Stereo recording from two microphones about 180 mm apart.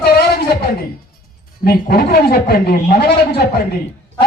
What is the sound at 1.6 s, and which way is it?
A man's voice, 60° left (ahead or behind).